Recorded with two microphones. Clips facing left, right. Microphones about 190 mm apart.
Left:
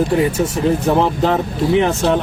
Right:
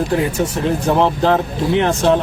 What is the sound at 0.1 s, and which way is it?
Speech, centre (ahead or behind).